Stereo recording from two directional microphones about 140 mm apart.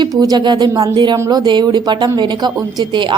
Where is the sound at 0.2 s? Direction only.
30° right (ahead or behind).